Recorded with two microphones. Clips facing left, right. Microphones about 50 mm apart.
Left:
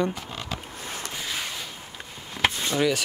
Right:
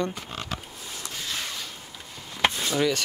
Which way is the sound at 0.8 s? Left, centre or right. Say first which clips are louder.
Left 4 dB; left.